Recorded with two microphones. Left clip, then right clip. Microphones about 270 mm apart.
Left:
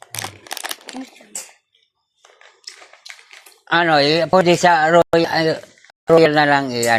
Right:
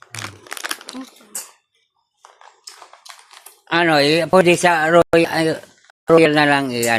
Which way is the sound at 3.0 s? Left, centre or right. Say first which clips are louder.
Left 4 dB; right.